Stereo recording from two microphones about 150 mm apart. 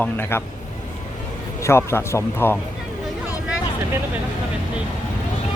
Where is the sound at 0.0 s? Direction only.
15° left (ahead or behind).